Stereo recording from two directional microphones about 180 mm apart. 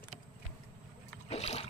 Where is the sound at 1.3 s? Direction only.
35° left (ahead or behind).